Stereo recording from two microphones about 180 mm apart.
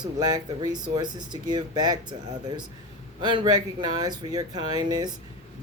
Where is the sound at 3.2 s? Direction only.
25° right (ahead or behind).